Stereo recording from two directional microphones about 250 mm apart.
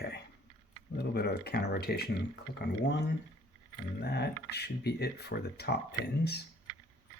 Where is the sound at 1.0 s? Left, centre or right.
Left.